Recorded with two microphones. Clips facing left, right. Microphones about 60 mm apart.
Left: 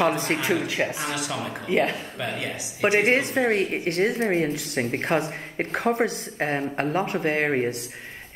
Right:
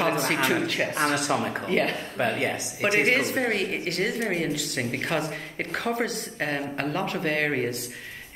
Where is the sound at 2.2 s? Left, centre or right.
Right.